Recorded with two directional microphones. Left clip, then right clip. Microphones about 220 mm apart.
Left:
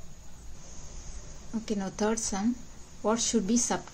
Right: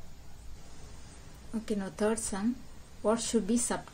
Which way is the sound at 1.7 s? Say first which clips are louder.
Left 1 dB; 5° left (ahead or behind).